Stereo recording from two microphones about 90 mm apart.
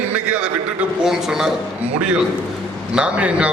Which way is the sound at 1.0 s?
5° right (ahead or behind).